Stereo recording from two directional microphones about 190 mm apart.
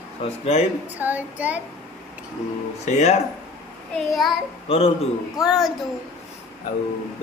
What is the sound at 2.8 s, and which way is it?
Speech, 35° left (ahead or behind).